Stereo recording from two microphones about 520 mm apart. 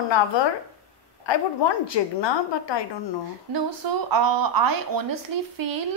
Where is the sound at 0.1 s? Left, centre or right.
Left.